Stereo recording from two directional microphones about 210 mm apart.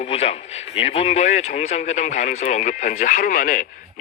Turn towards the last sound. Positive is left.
turn(degrees=40)  # may be behind; listen again after turning